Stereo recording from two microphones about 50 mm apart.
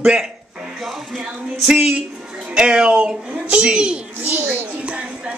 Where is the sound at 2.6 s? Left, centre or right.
Centre.